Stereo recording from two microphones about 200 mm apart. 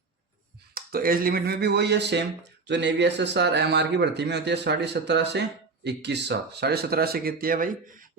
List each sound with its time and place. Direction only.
0.7 s speech: 50° right (ahead or behind)